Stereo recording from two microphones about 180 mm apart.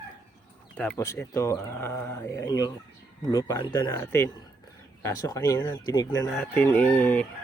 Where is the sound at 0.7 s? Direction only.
10° left (ahead or behind).